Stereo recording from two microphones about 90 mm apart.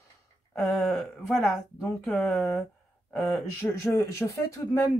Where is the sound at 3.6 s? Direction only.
30° left (ahead or behind).